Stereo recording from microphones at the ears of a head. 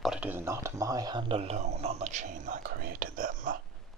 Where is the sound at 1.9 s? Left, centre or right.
Right.